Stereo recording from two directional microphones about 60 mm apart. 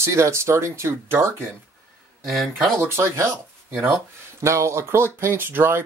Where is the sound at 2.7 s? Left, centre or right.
Right.